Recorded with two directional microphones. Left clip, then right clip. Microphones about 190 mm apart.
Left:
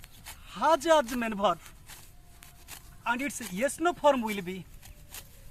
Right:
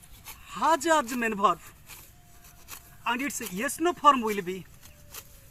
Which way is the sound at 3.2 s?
30° left (ahead or behind).